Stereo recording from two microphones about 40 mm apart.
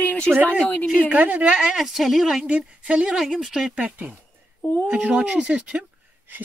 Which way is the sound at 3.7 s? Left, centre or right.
Right.